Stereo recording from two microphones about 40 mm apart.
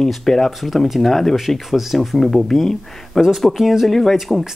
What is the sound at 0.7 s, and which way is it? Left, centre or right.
Speech, centre.